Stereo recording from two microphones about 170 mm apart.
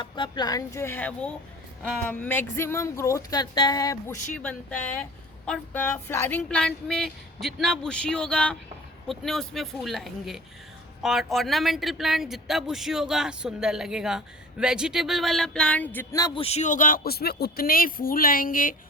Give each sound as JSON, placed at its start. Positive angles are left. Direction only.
{"t": 0.0, "sound": "speech", "side_deg": 25}
{"t": 4.4, "sound": "speech", "side_deg": 10}
{"t": 16.1, "sound": "speech", "side_deg": 25}